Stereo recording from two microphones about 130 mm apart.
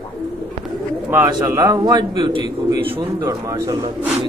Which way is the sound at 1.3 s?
30° right (ahead or behind).